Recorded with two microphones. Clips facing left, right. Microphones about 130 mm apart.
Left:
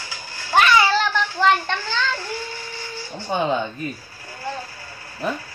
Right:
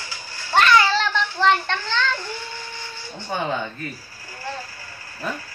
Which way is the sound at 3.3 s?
20° left (ahead or behind).